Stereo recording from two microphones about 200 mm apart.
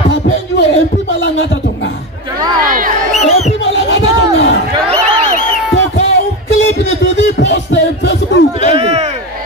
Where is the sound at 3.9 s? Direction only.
70° left (ahead or behind).